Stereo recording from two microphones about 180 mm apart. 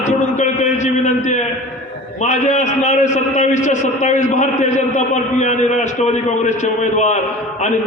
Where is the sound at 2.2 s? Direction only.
40° left (ahead or behind).